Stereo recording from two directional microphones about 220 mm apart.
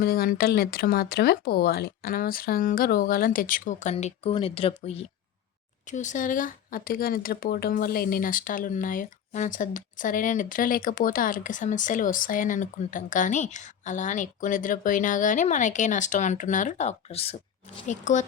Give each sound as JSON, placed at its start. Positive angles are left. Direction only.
{"t": 0.0, "sound": "speech", "side_deg": 45}